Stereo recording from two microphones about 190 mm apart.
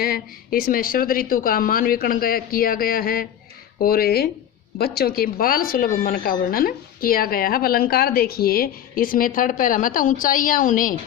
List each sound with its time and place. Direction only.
0.0 s speech: 50° left (ahead or behind)